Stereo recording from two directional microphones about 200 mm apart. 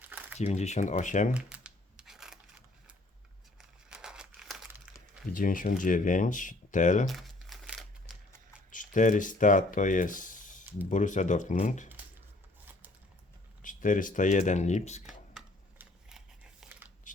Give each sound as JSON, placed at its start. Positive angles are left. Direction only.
{"t": 0.0, "sound": "crumpling", "side_deg": -10}
{"t": 0.3, "sound": "speech", "side_deg": 35}
{"t": 1.3, "sound": "a sound", "side_deg": -5}
{"t": 3.6, "sound": "crumpling", "side_deg": -5}
{"t": 5.3, "sound": "speech", "side_deg": 45}
{"t": 7.1, "sound": "crumpling", "side_deg": 0}
{"t": 8.7, "sound": "speech", "side_deg": 40}
{"t": 10.6, "sound": "a sound", "side_deg": -10}
{"t": 10.8, "sound": "speech", "side_deg": 40}
{"t": 13.6, "sound": "speech", "side_deg": 40}
{"t": 15.3, "sound": "a sound", "side_deg": 0}